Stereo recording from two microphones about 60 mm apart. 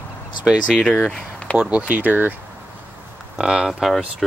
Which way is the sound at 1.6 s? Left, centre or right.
Right.